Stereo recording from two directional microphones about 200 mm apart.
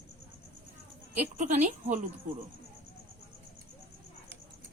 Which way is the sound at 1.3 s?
35° right (ahead or behind).